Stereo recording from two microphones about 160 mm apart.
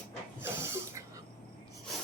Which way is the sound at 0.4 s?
15° right (ahead or behind).